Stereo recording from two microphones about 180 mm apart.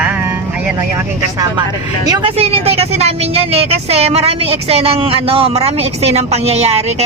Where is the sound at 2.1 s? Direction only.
30° right (ahead or behind).